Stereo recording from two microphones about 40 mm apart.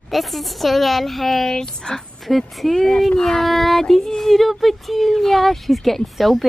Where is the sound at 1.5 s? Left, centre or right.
Centre.